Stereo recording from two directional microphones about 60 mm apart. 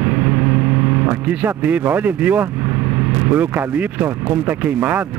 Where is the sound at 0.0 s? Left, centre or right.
Right.